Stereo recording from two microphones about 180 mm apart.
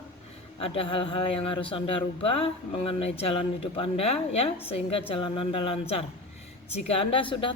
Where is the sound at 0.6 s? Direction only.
30° left (ahead or behind).